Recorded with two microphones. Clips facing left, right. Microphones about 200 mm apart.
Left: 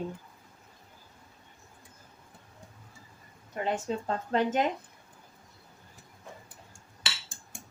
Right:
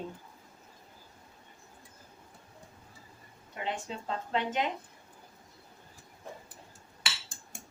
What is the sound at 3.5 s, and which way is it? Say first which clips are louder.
Speech: left 6 dB; 45° left (ahead or behind).